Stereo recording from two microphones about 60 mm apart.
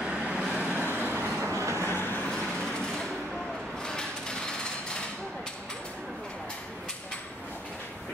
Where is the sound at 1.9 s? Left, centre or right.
Left.